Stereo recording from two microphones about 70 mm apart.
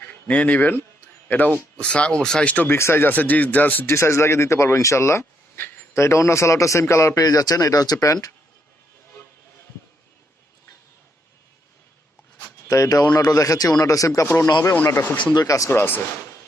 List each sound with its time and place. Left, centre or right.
0.3 s speech: left
1.7 s speech: centre
2.6 s speech: left
3.8 s a man's voice: left
7.2 s a man's voice: left
12.6 s a man's voice: left
14.9 s speech: left
15.2 s a man's voice: left